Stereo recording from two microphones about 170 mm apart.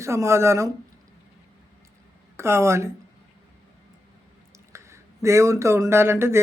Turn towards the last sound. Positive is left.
turn(degrees=-15)  # may be behind; listen again after turning